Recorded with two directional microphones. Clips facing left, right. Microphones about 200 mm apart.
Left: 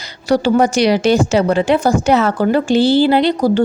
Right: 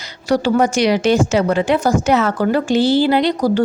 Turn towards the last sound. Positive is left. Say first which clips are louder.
# left 2 dB
turn(degrees=25)  # may be behind; listen again after turning